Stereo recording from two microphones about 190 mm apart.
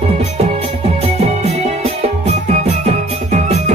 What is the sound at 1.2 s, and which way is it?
Music, 35° right (ahead or behind).